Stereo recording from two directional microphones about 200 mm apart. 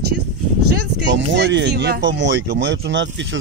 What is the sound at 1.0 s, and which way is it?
Speech, 65° right (ahead or behind).